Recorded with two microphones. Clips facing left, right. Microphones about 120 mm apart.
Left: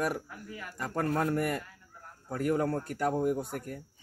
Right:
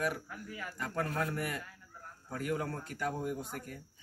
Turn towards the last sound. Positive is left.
turn(degrees=45)  # may be behind; listen again after turning